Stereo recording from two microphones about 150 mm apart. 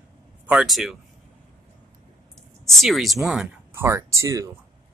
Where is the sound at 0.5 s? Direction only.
5° right (ahead or behind).